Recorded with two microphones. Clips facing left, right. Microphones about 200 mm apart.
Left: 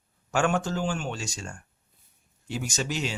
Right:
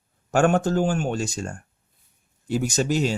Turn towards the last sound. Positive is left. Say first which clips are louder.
# right 8 dB
turn(degrees=-40)  # may be behind; listen again after turning